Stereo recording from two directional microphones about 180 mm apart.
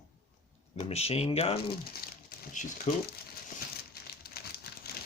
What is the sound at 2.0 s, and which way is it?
Crumpling, 55° left (ahead or behind).